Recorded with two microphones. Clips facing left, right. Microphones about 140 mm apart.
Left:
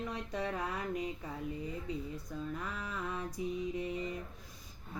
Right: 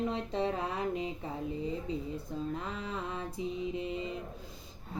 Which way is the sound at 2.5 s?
25° right (ahead or behind).